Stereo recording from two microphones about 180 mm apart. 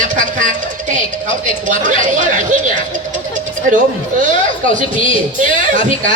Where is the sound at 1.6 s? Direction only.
45° right (ahead or behind).